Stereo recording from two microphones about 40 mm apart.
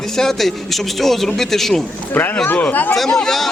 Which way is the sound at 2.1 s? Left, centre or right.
Left.